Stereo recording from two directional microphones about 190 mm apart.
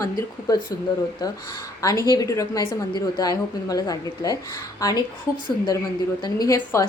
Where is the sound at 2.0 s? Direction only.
20° left (ahead or behind).